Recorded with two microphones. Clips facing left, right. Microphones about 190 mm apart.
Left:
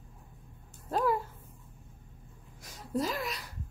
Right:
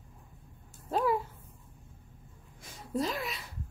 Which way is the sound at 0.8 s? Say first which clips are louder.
Even; centre (ahead or behind).